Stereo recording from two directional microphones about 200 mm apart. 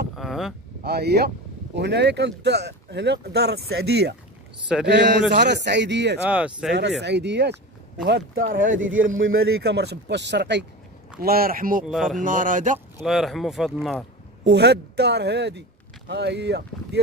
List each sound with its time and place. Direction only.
0.1 s a sound: centre (ahead or behind)
0.8 s speech: 55° right (ahead or behind)
6.2 s speech: 5° right (ahead or behind)
7.0 s speech: 60° right (ahead or behind)
8.5 s speech: 70° right (ahead or behind)
9.6 s speech: 55° right (ahead or behind)
11.1 s speech: 50° right (ahead or behind)
11.8 s speech: centre (ahead or behind)
12.2 s speech: 40° right (ahead or behind)
13.0 s speech: centre (ahead or behind)
14.4 s speech: 55° right (ahead or behind)